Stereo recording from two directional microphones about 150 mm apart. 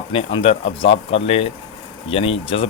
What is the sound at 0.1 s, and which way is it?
Speech, 40° left (ahead or behind).